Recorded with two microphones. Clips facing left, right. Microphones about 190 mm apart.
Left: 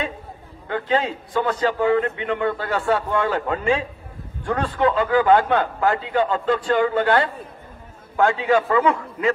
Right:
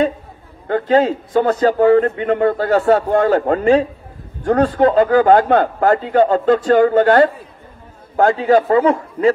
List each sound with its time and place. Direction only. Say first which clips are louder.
0.7 s a man's voice: right 8 dB; 40° right (ahead or behind)